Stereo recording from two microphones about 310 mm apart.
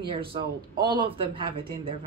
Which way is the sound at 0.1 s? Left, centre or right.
Centre.